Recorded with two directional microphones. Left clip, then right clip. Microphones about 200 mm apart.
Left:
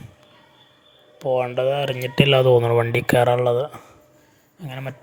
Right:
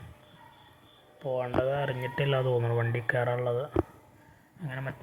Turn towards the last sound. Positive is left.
turn(degrees=45)  # may be behind; listen again after turning